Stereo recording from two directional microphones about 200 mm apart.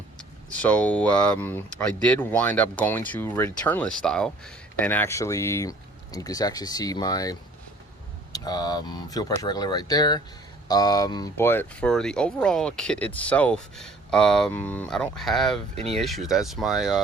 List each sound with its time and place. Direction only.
0.2 s speech: 5° left (ahead or behind)